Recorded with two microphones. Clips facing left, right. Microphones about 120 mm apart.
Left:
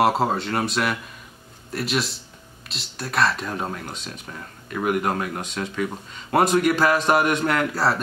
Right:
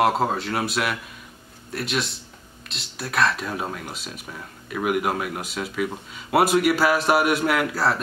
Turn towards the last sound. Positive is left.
turn(degrees=0)  # may be behind; listen again after turning